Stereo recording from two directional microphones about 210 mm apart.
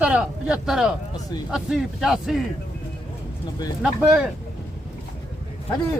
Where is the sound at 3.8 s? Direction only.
10° right (ahead or behind).